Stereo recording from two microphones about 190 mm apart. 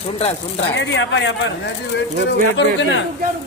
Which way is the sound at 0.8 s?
70° left (ahead or behind).